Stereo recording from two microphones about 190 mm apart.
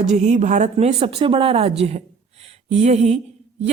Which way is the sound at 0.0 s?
35° right (ahead or behind).